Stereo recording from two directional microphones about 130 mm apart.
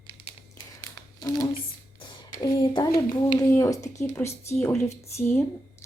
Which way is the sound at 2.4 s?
30° left (ahead or behind).